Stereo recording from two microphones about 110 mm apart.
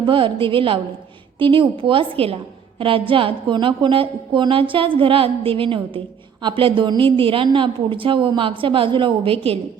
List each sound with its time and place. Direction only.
0.0 s a woman's voice: 50° right (ahead or behind)